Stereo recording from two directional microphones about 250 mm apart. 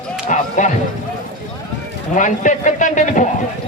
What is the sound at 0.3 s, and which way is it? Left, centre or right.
Speech, left.